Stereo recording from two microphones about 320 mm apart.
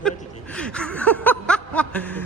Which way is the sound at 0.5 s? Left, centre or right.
Centre.